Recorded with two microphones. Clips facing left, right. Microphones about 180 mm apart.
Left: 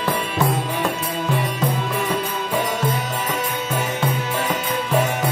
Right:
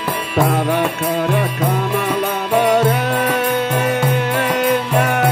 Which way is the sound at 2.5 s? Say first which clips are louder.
Right 9 dB; 65° right (ahead or behind).